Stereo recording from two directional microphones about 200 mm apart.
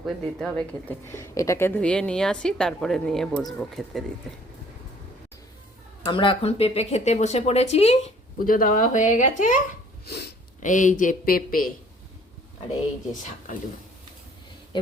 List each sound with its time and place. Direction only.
0.0 s speech: 5° left (ahead or behind)
6.1 s speech: 25° left (ahead or behind)
8.4 s speech: 45° left (ahead or behind)
10.1 s speech: 55° left (ahead or behind)
10.6 s speech: 40° left (ahead or behind)